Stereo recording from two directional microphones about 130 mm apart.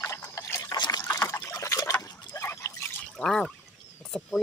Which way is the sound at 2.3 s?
20° left (ahead or behind).